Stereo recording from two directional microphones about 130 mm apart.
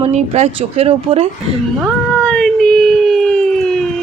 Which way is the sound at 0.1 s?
55° right (ahead or behind).